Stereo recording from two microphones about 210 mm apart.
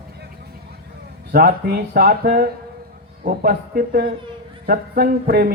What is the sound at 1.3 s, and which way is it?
A woman's voice, 45° right (ahead or behind).